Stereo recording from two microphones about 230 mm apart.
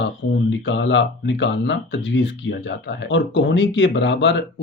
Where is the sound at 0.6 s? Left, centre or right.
Left.